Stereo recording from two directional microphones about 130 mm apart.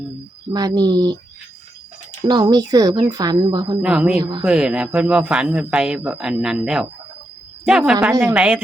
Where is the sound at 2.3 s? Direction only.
30° right (ahead or behind).